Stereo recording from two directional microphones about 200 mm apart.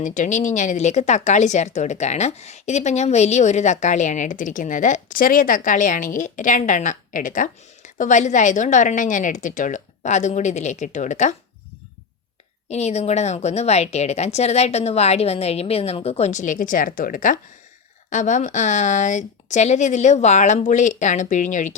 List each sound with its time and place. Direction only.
0.0 s speech: 40° left (ahead or behind)
12.7 s speech: 35° left (ahead or behind)